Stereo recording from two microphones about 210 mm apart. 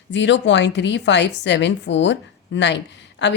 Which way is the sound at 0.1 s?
60° left (ahead or behind).